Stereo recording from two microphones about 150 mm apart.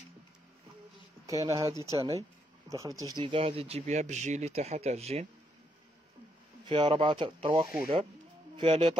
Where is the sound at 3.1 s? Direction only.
35° right (ahead or behind).